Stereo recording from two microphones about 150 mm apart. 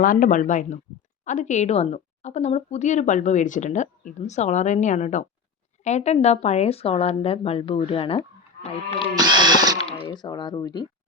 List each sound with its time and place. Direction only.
0.0 s a woman's voice: 65° left (ahead or behind); by 8.2 s 40° left (ahead or behind)
9.1 s speech: 30° right (ahead or behind)
10.1 s speech: 30° left (ahead or behind)